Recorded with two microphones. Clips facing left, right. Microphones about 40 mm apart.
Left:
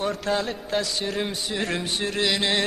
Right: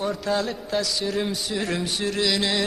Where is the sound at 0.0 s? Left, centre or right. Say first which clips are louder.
Even; left.